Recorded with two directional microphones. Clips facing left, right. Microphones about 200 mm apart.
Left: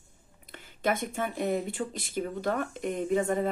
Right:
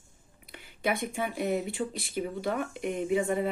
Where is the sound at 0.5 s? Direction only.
10° right (ahead or behind).